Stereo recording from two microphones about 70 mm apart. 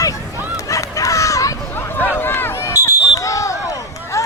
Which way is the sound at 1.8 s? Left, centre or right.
Left.